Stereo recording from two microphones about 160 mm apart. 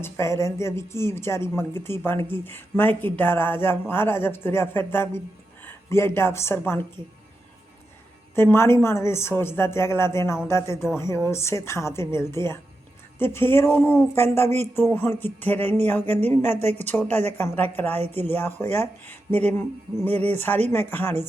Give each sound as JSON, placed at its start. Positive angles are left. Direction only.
{"t": 0.0, "sound": "speech", "side_deg": 15}
{"t": 8.4, "sound": "speech", "side_deg": 15}